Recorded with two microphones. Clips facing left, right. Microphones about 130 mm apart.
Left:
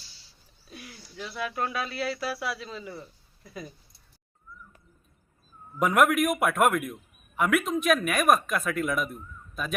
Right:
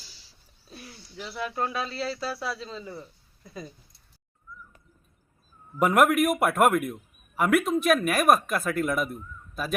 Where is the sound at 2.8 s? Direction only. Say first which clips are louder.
Right 1 dB; centre (ahead or behind).